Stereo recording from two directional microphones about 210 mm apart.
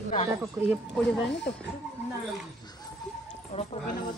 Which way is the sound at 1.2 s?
55° left (ahead or behind).